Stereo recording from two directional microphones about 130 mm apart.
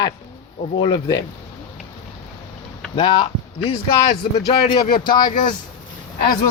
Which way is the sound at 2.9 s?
40° left (ahead or behind).